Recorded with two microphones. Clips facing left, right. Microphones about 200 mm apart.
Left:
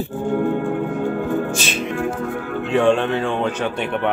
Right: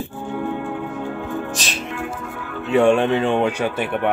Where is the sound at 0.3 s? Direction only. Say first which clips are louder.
Left 6 dB; 50° left (ahead or behind).